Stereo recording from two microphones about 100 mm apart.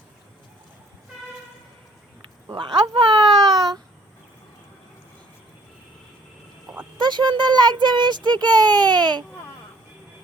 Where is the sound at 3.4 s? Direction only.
40° right (ahead or behind).